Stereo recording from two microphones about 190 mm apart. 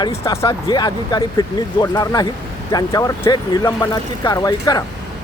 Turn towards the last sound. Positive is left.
turn(degrees=20)  # may be behind; listen again after turning